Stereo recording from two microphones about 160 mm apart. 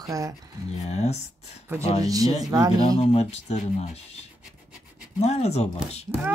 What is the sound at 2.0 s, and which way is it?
Speech, 20° right (ahead or behind).